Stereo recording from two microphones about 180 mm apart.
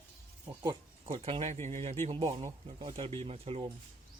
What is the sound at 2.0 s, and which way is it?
Speech, 30° right (ahead or behind).